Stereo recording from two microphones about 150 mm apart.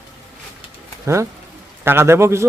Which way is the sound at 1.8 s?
15° right (ahead or behind).